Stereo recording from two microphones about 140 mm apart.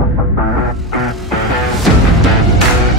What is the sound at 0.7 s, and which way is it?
Music, centre (ahead or behind).